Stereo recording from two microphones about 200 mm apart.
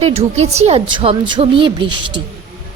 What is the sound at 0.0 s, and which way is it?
A woman's voice, 30° right (ahead or behind).